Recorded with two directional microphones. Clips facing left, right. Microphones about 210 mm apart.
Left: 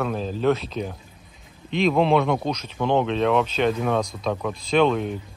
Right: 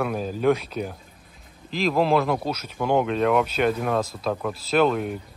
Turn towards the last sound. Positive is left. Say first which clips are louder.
# left 1 dB
turn(degrees=-5)  # may be behind; listen again after turning